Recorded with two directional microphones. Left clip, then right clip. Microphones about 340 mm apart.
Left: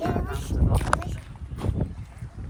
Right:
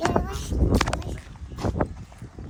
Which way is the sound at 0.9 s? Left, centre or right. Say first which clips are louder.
Left 7 dB; centre.